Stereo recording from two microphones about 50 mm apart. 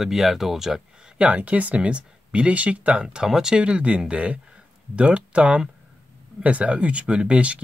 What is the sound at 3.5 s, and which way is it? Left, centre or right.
Speech, right.